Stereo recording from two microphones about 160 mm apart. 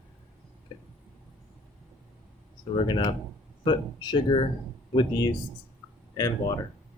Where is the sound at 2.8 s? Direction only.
30° left (ahead or behind).